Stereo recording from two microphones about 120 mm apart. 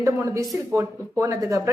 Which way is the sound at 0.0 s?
20° right (ahead or behind).